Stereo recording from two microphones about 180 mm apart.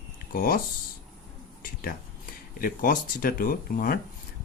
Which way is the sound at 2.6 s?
50° left (ahead or behind).